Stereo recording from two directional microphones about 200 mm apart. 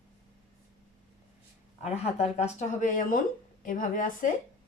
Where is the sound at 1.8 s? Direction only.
30° left (ahead or behind).